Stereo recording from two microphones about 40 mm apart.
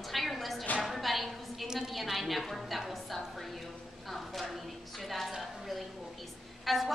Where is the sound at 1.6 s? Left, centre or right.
Centre.